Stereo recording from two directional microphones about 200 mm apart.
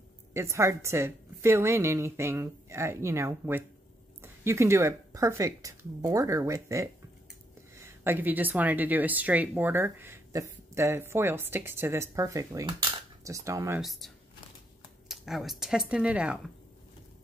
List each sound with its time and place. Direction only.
0.3 s speech: 15° right (ahead or behind)
13.7 s speech: centre (ahead or behind)